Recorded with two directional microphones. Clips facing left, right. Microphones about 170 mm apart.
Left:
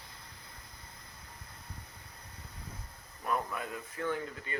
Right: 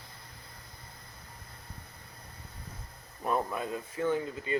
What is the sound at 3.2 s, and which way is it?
Speech, 25° right (ahead or behind).